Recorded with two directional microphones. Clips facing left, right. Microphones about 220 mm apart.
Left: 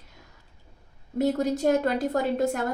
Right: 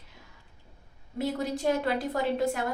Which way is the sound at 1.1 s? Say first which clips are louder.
Left 6 dB; 45° left (ahead or behind).